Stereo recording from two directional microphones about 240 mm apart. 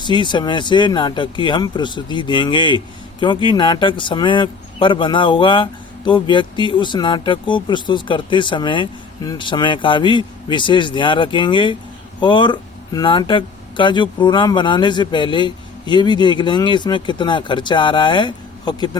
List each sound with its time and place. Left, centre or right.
0.0 s speech: centre